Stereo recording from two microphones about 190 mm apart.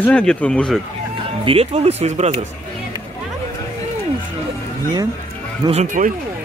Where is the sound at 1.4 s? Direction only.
30° right (ahead or behind).